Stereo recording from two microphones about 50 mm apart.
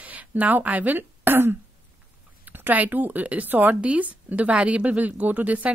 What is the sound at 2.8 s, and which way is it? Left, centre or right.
A woman's voice, right.